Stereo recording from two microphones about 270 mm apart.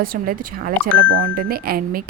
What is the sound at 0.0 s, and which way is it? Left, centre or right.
A woman's voice, right.